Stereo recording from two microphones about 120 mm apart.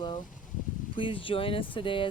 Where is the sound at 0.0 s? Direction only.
40° left (ahead or behind).